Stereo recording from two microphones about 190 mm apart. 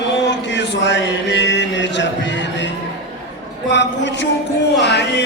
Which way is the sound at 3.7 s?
70° left (ahead or behind).